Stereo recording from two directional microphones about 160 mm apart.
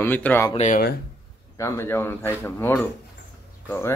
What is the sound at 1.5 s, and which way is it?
Speech, 20° left (ahead or behind).